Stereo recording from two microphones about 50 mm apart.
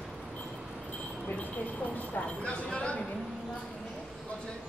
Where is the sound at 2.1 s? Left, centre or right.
Left.